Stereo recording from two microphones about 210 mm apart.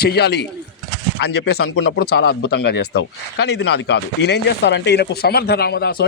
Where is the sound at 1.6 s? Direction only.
70° left (ahead or behind); by 6.0 s 50° left (ahead or behind).